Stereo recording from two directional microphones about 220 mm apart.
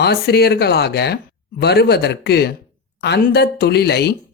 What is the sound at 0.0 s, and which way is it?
Speech, 50° left (ahead or behind).